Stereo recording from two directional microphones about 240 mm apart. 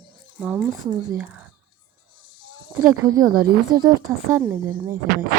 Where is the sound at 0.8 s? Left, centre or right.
Centre.